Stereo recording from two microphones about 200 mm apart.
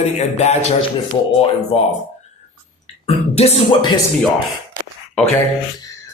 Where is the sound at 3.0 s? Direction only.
30° left (ahead or behind).